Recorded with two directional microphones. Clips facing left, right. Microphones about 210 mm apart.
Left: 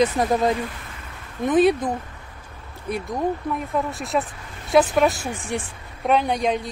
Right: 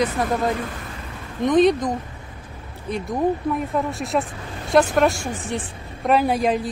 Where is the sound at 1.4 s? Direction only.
5° left (ahead or behind).